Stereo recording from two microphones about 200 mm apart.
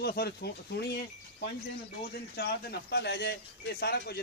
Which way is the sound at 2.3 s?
55° left (ahead or behind).